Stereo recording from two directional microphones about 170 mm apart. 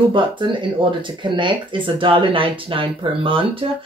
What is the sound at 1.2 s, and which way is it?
Speech, 30° right (ahead or behind).